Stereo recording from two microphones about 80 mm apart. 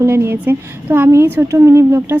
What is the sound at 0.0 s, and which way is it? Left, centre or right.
A woman's voice, right.